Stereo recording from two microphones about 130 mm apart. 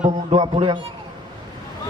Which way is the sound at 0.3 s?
40° right (ahead or behind).